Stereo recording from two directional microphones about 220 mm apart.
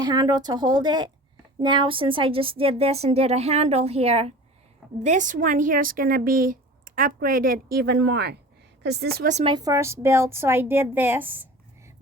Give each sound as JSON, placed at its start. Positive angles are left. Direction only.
{"t": 0.0, "sound": "a woman's voice", "side_deg": -20}
{"t": 9.3, "sound": "a woman's voice", "side_deg": -25}